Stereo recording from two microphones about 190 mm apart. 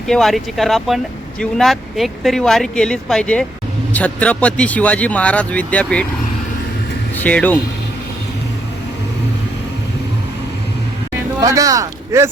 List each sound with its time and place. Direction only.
0.1 s speech: centre (ahead or behind)
7.2 s speech: 10° left (ahead or behind)
11.3 s speech: 15° right (ahead or behind)